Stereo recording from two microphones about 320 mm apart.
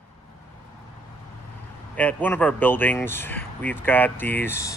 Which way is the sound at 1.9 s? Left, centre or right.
Centre.